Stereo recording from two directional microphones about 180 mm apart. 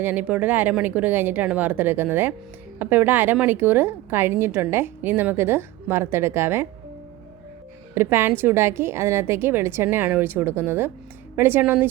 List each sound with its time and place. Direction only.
0.0 s a woman's voice: 10° right (ahead or behind)
7.9 s a woman's voice: 10° right (ahead or behind)